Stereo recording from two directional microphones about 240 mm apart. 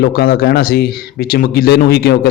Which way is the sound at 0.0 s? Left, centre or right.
Left.